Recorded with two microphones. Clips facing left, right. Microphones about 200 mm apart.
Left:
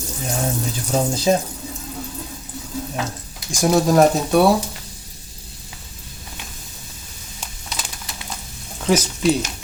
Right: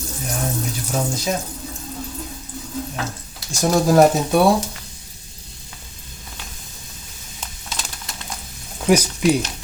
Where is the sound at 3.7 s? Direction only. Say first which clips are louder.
Right 1 dB; centre (ahead or behind).